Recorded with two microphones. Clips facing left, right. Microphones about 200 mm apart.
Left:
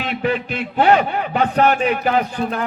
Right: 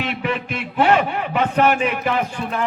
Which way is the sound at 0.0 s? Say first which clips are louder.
Left 3 dB; 35° left (ahead or behind).